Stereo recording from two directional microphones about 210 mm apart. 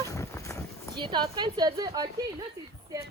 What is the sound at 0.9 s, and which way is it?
Speech, 20° right (ahead or behind).